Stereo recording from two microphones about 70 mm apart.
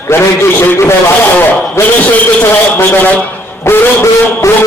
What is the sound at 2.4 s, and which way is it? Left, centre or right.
Speech, left.